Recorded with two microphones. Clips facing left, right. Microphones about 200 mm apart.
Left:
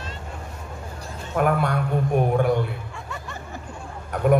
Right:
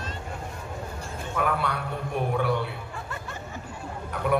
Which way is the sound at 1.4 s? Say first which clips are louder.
Left 6 dB; 45° left (ahead or behind).